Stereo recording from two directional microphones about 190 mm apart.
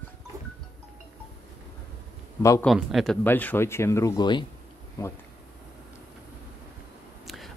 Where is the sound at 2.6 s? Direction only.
Centre (ahead or behind); by 4.4 s 20° left (ahead or behind).